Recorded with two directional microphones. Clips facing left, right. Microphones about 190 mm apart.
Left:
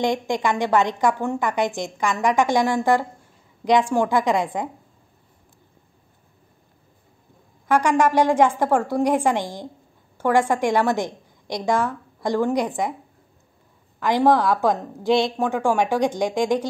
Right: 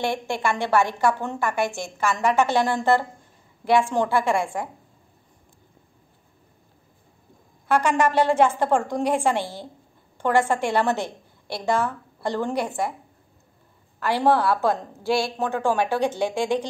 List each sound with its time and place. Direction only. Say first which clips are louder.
0.0 s a woman's voice: left 3 dB; 15° left (ahead or behind)
7.6 s a woman's voice: left 2 dB; 10° left (ahead or behind)
13.9 s a woman's voice: left 3 dB; 15° left (ahead or behind)